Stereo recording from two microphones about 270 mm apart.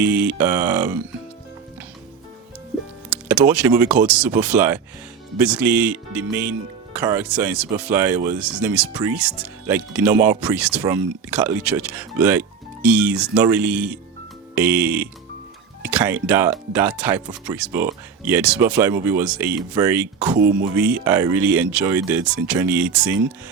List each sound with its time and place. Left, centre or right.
0.0 s speech: centre
3.1 s speech: centre
20.4 s music: right
20.7 s speech: centre